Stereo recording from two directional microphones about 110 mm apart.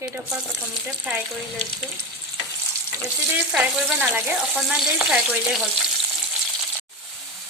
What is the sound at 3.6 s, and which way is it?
Speech, 20° right (ahead or behind).